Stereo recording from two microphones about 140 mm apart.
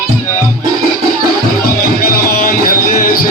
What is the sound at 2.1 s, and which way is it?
Music, 90° left.